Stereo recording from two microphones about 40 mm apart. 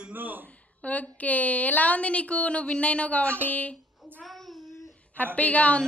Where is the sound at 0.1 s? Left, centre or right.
Right.